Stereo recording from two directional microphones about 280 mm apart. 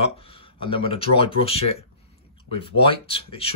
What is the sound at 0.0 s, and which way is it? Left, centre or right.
Speech, centre.